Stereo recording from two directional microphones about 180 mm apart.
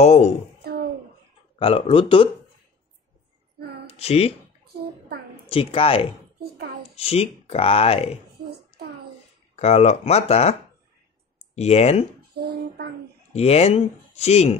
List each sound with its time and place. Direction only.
0.0 s a child's voice: 40° left (ahead or behind)
1.6 s speech: 30° left (ahead or behind)
3.8 s child singing: 35° left (ahead or behind)
5.5 s speech: 30° left (ahead or behind)
9.6 s speech: 35° left (ahead or behind)
12.4 s child singing: 60° right (ahead or behind)
13.3 s speech: 35° left (ahead or behind)